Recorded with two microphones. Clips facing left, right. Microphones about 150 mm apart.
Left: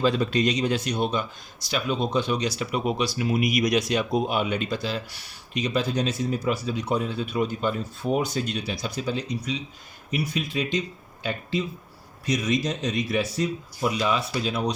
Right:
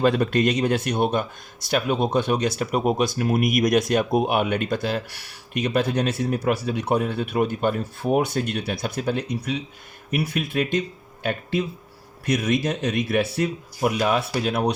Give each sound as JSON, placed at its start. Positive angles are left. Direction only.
{"t": 0.0, "sound": "speech", "side_deg": -55}